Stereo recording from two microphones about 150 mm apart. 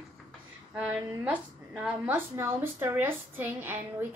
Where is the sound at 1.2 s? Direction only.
10° right (ahead or behind).